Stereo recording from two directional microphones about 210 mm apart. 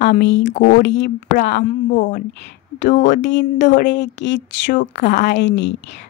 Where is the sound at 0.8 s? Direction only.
55° left (ahead or behind).